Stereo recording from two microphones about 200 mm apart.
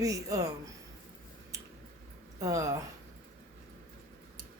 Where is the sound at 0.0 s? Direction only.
15° right (ahead or behind).